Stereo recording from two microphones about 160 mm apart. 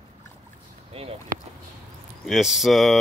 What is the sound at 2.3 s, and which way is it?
Speech, centre (ahead or behind).